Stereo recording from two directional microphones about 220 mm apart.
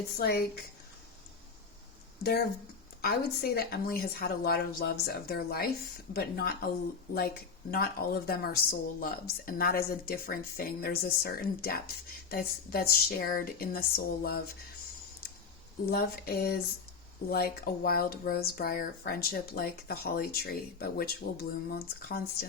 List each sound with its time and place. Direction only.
0.2 s speech: 45° left (ahead or behind)
3.0 s speech: 45° left (ahead or behind)
7.7 s speech: 45° left (ahead or behind)
15.9 s speech: 45° left (ahead or behind)